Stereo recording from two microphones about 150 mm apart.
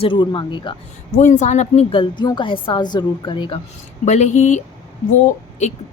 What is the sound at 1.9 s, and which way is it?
A woman's voice, 30° left (ahead or behind).